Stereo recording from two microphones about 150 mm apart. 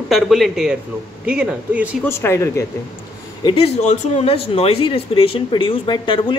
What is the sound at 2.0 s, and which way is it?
Speech, 15° left (ahead or behind).